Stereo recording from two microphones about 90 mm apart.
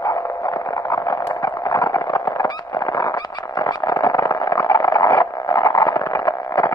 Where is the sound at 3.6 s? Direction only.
45° left (ahead or behind).